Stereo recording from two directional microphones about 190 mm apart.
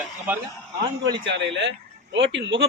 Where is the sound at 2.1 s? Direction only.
65° right (ahead or behind).